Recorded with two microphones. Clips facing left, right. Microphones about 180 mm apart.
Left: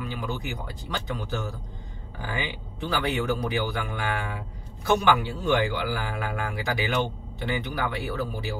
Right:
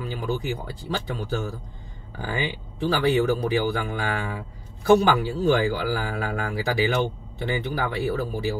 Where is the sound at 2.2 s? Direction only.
30° right (ahead or behind).